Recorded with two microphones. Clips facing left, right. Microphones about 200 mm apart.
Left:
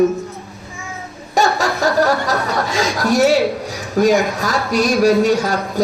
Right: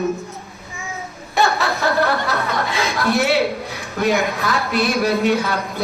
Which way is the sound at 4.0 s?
40° left (ahead or behind).